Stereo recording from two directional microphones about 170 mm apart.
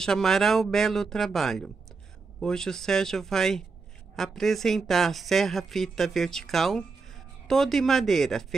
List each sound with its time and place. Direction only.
0.0 s speech: 5° left (ahead or behind)